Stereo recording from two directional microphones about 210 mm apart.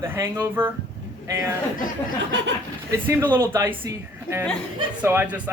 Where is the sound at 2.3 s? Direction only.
55° right (ahead or behind).